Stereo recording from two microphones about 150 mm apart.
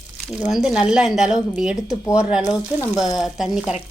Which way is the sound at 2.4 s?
25° left (ahead or behind).